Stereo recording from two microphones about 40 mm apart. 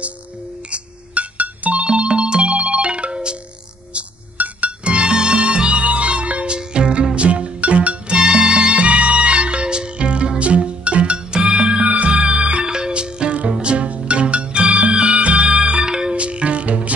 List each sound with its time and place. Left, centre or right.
0.7 s ringtone: right
1.9 s music: right
4.4 s music: right
8.2 s music: right